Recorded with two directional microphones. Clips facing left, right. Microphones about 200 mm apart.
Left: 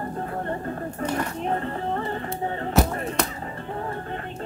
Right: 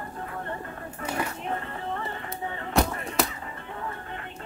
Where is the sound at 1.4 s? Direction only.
35° left (ahead or behind).